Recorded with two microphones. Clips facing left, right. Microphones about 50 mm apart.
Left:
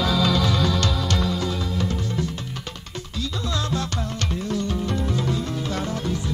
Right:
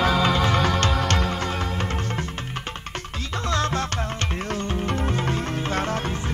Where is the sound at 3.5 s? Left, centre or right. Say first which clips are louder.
Right 4 dB; right.